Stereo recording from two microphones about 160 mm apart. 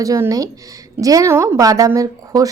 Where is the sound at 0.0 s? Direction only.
20° right (ahead or behind).